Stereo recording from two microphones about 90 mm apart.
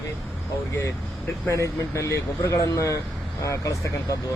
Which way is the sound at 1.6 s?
35° left (ahead or behind).